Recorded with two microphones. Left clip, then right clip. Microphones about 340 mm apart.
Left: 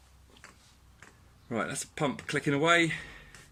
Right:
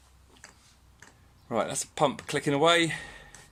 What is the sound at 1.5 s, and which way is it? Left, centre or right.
Speech, centre.